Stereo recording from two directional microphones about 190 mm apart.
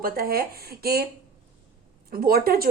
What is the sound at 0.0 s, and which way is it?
A woman's voice, 50° right (ahead or behind).